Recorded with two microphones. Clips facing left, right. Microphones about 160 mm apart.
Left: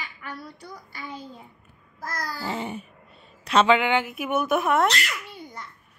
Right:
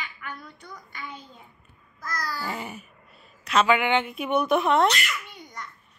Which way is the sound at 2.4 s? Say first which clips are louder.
Left 3 dB; 25° left (ahead or behind).